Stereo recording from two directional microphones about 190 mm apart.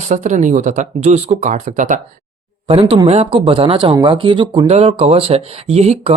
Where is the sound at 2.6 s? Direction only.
30° right (ahead or behind).